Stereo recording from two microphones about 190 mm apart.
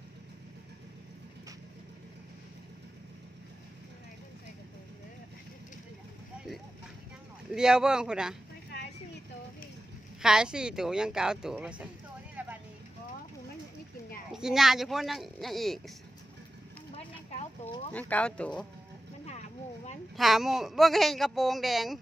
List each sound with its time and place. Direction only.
7.5 s speech: 5° right (ahead or behind)
10.2 s speech: 5° right (ahead or behind)
12.4 s a sound: 10° right (ahead or behind)
14.3 s speech: centre (ahead or behind)
16.9 s a sound: 35° left (ahead or behind)
17.9 s speech: 10° left (ahead or behind)
20.2 s speech: centre (ahead or behind)